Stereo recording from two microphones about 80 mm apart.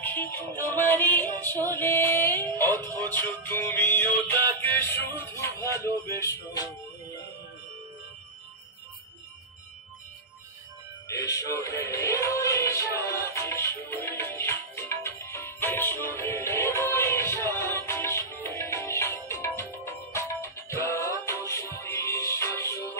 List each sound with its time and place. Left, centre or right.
0.0 s music: left
6.5 s music: left
11.1 s speech: left
11.9 s music: left